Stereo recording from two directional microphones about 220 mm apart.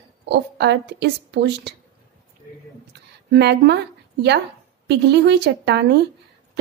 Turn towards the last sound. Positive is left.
turn(degrees=-50)  # may be behind; listen again after turning